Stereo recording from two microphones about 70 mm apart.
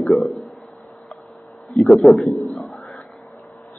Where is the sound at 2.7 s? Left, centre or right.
Left.